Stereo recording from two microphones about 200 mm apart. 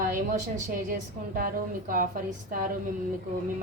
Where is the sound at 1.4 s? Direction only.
45° right (ahead or behind).